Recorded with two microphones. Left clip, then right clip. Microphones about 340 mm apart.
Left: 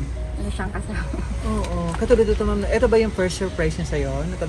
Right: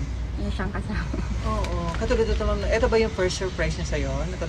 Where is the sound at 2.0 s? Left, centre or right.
Right.